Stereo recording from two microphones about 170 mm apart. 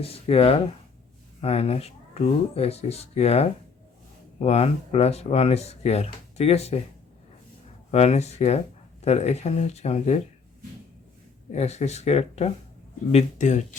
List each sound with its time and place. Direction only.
0.0 s speech: 35° left (ahead or behind)
7.9 s speech: 40° left (ahead or behind)
11.5 s speech: 40° left (ahead or behind)